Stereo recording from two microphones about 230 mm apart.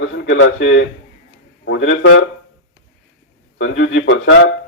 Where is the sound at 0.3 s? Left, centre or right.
Left.